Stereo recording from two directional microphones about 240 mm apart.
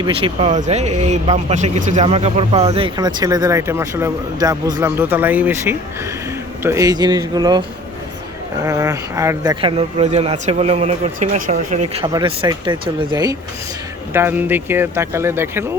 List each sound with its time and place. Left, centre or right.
0.0 s speech: right
8.6 s speech: centre; by 12.0 s right
12.0 s speech: centre